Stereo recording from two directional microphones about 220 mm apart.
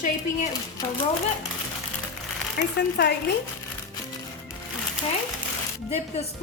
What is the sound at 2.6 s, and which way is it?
Speech, 45° left (ahead or behind).